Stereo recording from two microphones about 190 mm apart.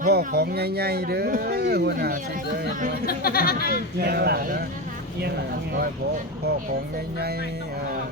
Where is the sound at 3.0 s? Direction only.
50° left (ahead or behind).